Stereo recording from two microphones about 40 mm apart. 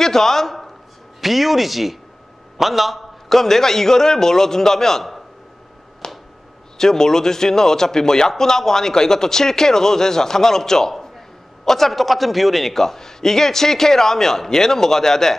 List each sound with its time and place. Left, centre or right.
0.0 s a man's voice: centre
1.2 s a man's voice: centre
6.0 s finger snapping: centre
6.8 s a man's voice: centre